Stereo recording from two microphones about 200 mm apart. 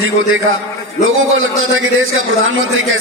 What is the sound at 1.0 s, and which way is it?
A man's voice, 90° right.